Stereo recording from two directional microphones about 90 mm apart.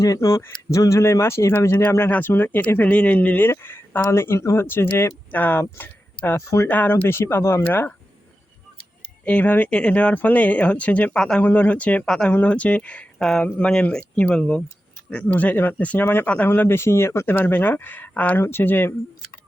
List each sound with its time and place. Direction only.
0.0 s speech: 35° left (ahead or behind)
6.2 s speech: 35° left (ahead or behind)
6.7 s speech: 20° left (ahead or behind)
9.2 s speech: 15° left (ahead or behind)
12.0 s speech: 5° left (ahead or behind)
12.3 s speech: 15° left (ahead or behind)